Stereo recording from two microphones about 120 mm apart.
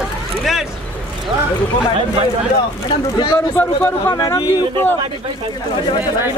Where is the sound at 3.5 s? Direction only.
20° left (ahead or behind).